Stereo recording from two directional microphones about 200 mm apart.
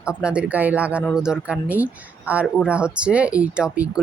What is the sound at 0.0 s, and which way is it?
Speech, 5° right (ahead or behind).